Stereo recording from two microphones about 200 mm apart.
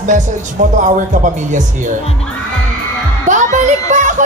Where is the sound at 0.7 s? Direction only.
40° right (ahead or behind).